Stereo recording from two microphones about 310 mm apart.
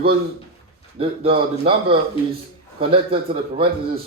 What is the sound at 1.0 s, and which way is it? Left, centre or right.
A man's voice, centre.